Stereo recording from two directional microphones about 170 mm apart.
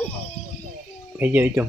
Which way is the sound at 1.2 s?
10° right (ahead or behind).